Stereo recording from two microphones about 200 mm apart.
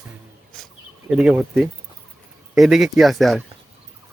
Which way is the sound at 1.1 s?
5° right (ahead or behind).